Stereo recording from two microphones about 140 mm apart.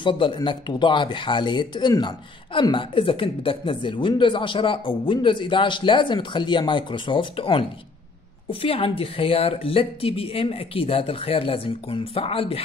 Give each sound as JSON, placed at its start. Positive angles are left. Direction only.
{"t": 0.0, "sound": "speech", "side_deg": 35}